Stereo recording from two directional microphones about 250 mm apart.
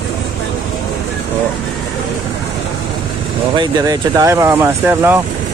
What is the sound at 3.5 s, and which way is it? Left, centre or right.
Speech, centre.